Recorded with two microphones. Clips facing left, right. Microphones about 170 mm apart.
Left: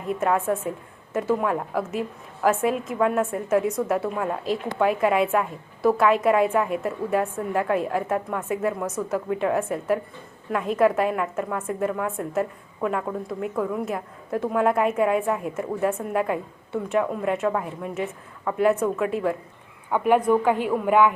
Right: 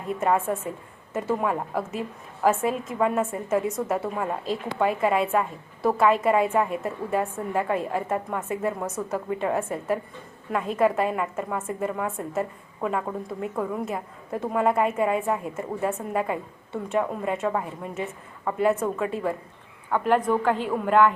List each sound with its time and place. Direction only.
0.1 s a woman's voice: centre (ahead or behind)